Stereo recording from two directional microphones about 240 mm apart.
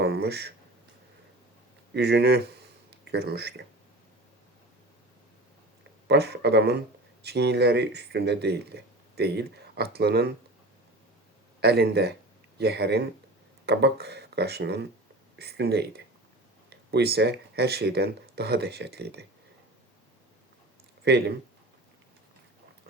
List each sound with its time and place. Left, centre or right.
0.0 s a sound: right
1.9 s speech: right
6.1 s speech: right
11.6 s speech: right
21.0 s speech: right